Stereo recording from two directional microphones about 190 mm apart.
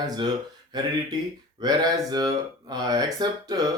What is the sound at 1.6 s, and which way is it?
Speech, 20° right (ahead or behind).